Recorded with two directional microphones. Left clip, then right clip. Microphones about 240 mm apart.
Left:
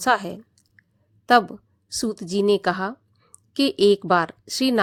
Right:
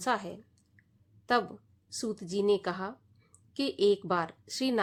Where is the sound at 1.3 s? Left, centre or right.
Left.